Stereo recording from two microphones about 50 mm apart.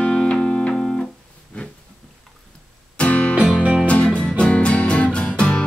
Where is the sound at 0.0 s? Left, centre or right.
Centre.